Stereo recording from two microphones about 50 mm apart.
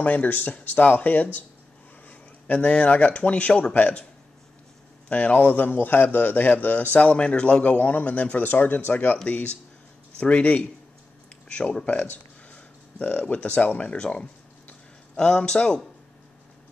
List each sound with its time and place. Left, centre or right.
0.0 s a man's voice: left
5.1 s a man's voice: left
7.6 s a man's voice: left
11.4 s a sound: left
13.3 s speech: left